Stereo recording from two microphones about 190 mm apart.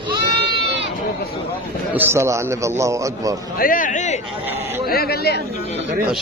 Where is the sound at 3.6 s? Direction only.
45° left (ahead or behind).